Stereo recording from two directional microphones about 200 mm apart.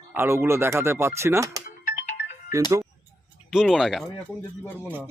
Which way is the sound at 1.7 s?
40° left (ahead or behind).